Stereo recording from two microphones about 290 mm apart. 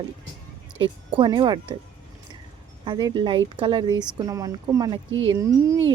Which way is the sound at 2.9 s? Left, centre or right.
Centre.